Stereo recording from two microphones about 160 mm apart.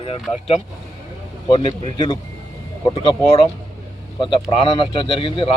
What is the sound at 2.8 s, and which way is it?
A man's voice, 35° left (ahead or behind).